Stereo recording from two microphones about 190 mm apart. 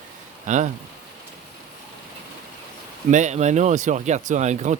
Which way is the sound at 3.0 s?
40° right (ahead or behind).